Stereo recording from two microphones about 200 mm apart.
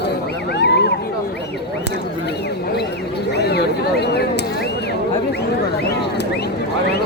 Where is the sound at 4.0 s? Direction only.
55° left (ahead or behind).